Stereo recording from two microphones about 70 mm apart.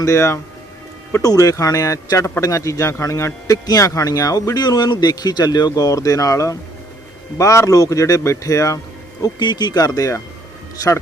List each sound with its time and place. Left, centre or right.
0.0 s a man's voice: left
1.2 s a man's voice: left
9.2 s speech: left